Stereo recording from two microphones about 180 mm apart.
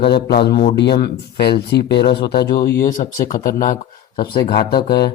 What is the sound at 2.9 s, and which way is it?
Speech, 45° left (ahead or behind).